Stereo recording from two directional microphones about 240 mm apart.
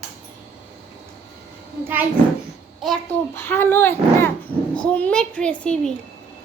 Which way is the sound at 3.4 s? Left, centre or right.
Centre.